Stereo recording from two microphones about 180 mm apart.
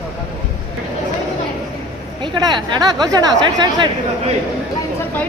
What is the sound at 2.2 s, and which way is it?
Speech, 25° right (ahead or behind).